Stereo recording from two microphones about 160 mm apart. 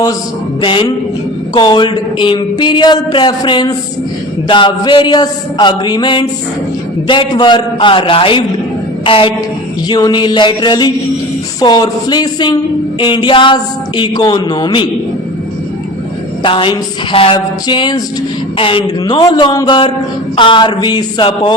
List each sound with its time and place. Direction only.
0.6 s a man's voice: 30° left (ahead or behind)
16.4 s a man's voice: 30° left (ahead or behind)